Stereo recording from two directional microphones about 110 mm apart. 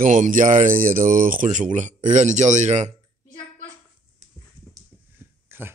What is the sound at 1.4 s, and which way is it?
Speech, 90° right.